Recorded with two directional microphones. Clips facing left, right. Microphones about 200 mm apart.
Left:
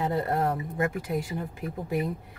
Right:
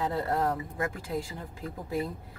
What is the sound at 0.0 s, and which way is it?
A woman's voice, 20° left (ahead or behind).